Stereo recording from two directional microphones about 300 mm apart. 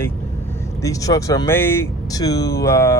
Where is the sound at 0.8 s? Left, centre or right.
Centre.